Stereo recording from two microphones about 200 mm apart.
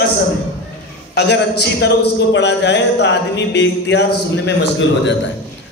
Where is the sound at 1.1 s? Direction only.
55° left (ahead or behind).